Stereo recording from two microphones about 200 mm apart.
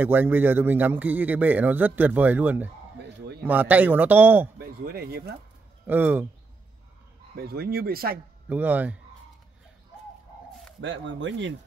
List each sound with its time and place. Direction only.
0.0 s a man's voice: 10° right (ahead or behind)
4.6 s speech: 50° right (ahead or behind)
5.9 s a man's voice: 10° right (ahead or behind)
7.3 s speech: 50° right (ahead or behind)
8.5 s a man's voice: 10° right (ahead or behind)
10.8 s speech: 70° right (ahead or behind)